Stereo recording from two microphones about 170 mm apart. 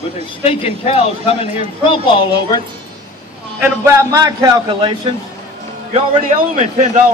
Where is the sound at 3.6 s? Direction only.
15° right (ahead or behind).